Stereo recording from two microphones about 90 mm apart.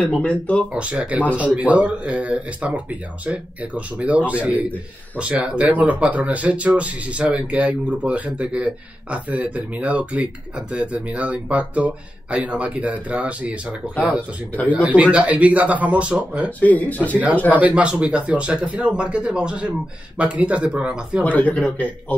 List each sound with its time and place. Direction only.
0.0 s speech: 10° left (ahead or behind)
0.7 s speech: 15° right (ahead or behind)
16.4 s speech: 15° left (ahead or behind)
17.5 s speech: 15° right (ahead or behind)
21.2 s speech: 15° left (ahead or behind)